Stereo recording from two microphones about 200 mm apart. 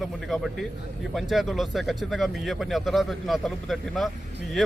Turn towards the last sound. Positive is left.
turn(degrees=0)  # may be behind; listen again after turning